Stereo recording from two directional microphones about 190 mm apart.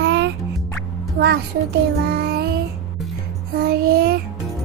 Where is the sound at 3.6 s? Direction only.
55° right (ahead or behind).